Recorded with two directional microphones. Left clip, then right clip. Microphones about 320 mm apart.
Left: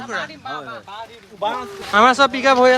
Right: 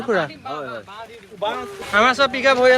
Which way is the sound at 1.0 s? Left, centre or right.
Left.